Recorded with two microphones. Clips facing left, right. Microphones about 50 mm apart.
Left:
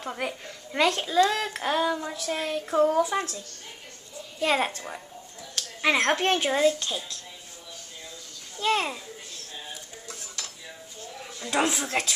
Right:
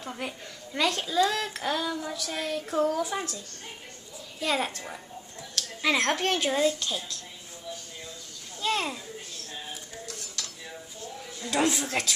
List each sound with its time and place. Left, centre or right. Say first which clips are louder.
0.2 s a woman's voice: left 4 dB; left
0.9 s speech: left 3 dB; left
4.4 s speech: left 4 dB; left
8.5 s a child's voice: left 3 dB; left
10.0 s dishes: left 1 dB; left
11.5 s speech: left 1 dB; centre